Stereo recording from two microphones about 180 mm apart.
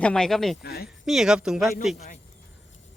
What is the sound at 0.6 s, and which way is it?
Speech, 60° left (ahead or behind).